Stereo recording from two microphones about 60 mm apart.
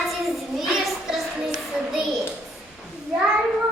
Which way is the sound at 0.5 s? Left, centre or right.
Centre.